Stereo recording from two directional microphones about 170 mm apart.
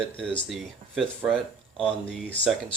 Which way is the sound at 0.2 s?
5° left (ahead or behind).